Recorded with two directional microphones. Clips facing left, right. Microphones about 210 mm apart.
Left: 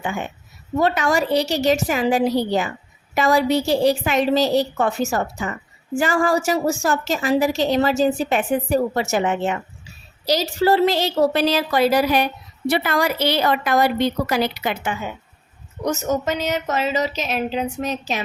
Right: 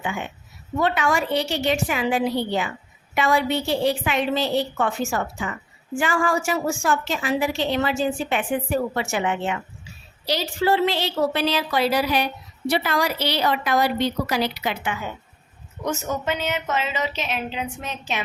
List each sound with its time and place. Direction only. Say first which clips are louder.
0.8 s a woman's voice: left 3 dB; 40° left (ahead or behind)